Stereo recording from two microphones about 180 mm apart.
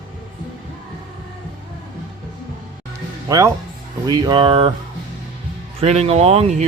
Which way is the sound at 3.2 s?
20° right (ahead or behind).